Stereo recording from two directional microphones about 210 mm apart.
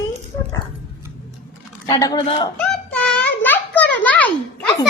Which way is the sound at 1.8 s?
20° left (ahead or behind).